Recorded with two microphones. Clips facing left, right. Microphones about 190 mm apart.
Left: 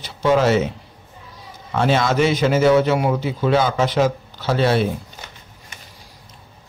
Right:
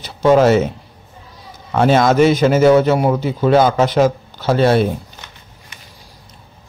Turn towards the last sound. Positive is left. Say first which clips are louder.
# right 5 dB
turn(degrees=-45)  # may be behind; listen again after turning